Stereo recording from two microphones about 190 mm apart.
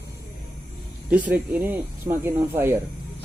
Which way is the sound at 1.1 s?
10° right (ahead or behind).